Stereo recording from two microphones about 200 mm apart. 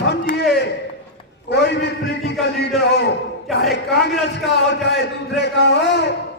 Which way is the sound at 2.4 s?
55° left (ahead or behind).